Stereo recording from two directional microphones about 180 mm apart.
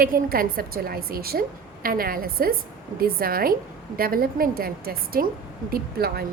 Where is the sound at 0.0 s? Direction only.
55° right (ahead or behind).